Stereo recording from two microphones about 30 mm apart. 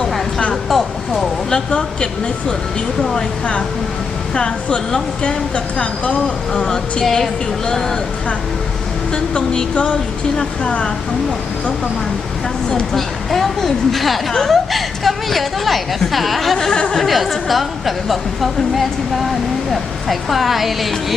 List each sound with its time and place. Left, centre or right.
0.5 s speech: centre
1.7 s a woman's voice: left
4.4 s a woman's voice: left
7.0 s speech: centre
9.7 s a sound: left
12.9 s speech: centre